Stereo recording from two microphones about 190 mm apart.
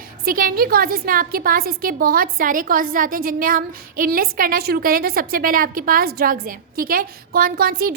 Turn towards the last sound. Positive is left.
turn(degrees=-50)  # may be behind; listen again after turning